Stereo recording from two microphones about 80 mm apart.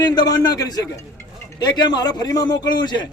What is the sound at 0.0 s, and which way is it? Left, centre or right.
A man's voice, left.